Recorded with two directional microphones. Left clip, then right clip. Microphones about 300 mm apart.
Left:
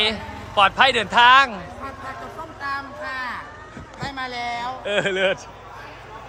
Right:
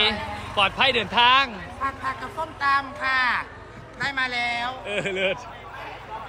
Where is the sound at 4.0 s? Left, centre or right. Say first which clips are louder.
Right 4 dB; centre.